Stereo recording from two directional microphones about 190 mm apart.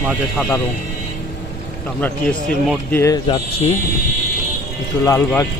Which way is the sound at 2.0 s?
5° left (ahead or behind).